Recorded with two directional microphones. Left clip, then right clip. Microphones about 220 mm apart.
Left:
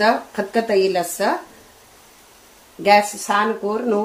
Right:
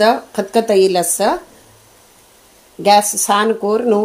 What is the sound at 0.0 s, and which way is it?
Speech, 25° right (ahead or behind).